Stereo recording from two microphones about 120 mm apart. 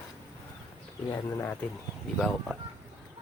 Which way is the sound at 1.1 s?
25° left (ahead or behind).